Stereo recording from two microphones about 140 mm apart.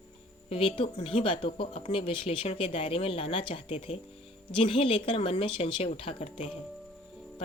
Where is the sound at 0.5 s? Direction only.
40° left (ahead or behind).